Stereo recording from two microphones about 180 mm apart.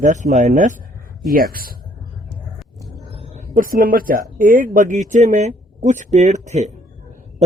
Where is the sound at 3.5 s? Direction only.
50° right (ahead or behind).